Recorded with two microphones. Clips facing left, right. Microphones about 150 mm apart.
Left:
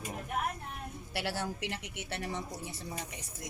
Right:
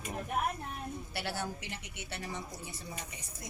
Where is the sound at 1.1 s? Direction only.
90° left.